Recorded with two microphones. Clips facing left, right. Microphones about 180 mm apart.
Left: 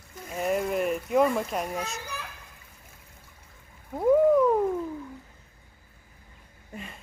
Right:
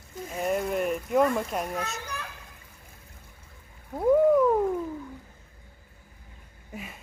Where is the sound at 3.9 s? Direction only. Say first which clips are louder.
Even; centre (ahead or behind).